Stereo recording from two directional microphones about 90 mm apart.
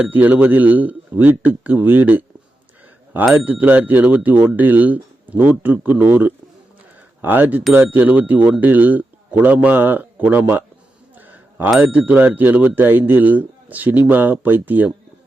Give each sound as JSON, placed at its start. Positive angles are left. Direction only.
{"t": 0.0, "sound": "speech", "side_deg": -20}
{"t": 3.2, "sound": "speech", "side_deg": -15}
{"t": 11.3, "sound": "a sound", "side_deg": -20}
{"t": 11.8, "sound": "speech", "side_deg": -20}